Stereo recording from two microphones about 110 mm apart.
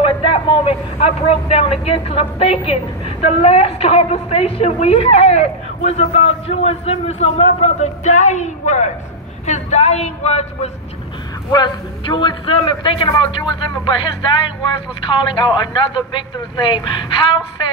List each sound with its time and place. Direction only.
0.0 s a sound: 55° left (ahead or behind)
1.5 s a woman's voice: 60° left (ahead or behind); by 10.7 s 90° left
11.5 s speech: 40° left (ahead or behind)